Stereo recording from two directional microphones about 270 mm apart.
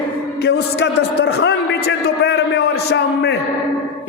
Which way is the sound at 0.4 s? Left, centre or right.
Left.